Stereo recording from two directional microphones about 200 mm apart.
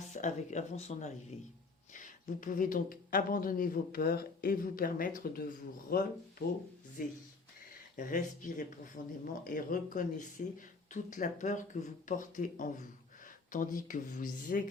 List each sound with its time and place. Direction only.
0.1 s speech: 35° left (ahead or behind)